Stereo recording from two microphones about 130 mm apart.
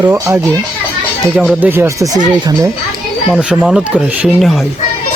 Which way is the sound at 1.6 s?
20° right (ahead or behind).